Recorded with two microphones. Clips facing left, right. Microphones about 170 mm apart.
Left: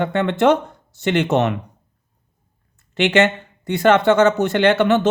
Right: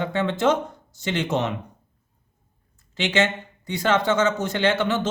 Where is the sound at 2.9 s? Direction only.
60° left (ahead or behind).